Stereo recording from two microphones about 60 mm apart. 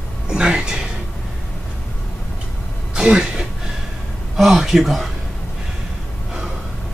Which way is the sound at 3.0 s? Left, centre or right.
Centre.